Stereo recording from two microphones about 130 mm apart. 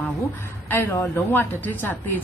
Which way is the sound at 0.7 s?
15° left (ahead or behind).